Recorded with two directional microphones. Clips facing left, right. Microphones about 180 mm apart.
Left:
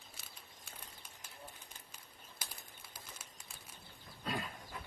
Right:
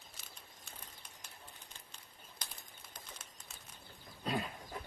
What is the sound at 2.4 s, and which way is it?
Bird, 5° left (ahead or behind).